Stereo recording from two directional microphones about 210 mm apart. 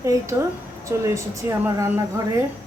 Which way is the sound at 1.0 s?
15° right (ahead or behind).